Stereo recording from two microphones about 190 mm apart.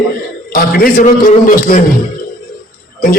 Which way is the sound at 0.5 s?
50° left (ahead or behind).